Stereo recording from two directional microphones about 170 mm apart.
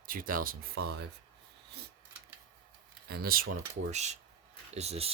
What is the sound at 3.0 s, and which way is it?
Speech, 60° right (ahead or behind).